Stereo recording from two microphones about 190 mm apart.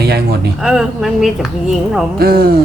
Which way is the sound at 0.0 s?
60° right (ahead or behind).